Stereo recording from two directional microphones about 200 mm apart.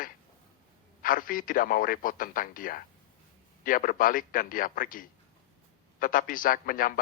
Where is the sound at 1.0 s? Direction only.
45° left (ahead or behind).